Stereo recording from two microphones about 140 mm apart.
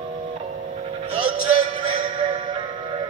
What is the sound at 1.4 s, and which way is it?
Music, 60° right (ahead or behind).